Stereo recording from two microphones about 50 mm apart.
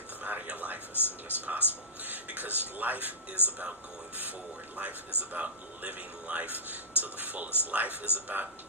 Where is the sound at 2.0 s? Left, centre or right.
Right.